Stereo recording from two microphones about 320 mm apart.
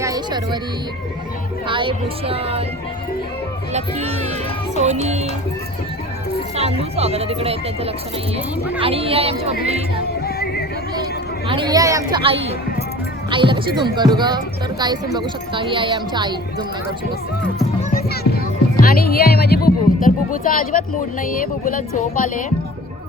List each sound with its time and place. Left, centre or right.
0.0 s music: centre
1.6 s speech: centre
3.7 s speech: centre
6.9 s speech: centre
10.2 s music: left
11.4 s speech: centre
17.9 s music: left
18.8 s speech: left